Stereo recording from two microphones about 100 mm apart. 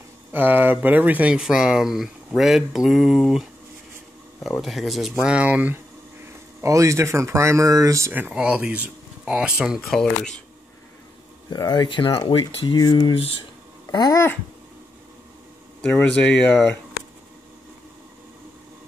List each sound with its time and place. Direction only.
0.3 s speech: 20° right (ahead or behind); by 3.4 s 5° right (ahead or behind)
4.6 s speech: centre (ahead or behind)
6.6 s speech: 30° right (ahead or behind)
8.1 s speech: 15° right (ahead or behind)
9.8 s speech: 5° left (ahead or behind)
11.5 s speech: 45° left (ahead or behind); by 12.6 s 65° left (ahead or behind)
12.6 s speech: 45° left (ahead or behind)
15.8 s speech: 10° left (ahead or behind)